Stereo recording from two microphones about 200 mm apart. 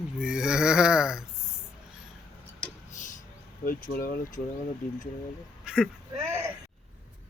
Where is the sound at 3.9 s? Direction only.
45° left (ahead or behind).